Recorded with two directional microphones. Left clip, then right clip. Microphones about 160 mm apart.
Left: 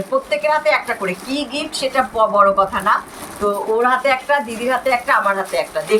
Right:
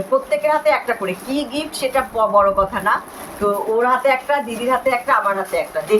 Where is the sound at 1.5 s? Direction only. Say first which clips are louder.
Left 2 dB; 45° right (ahead or behind).